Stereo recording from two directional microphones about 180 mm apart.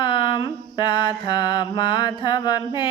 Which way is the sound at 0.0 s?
25° left (ahead or behind).